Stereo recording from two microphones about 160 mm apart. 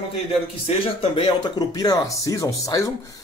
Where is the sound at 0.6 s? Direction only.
35° left (ahead or behind).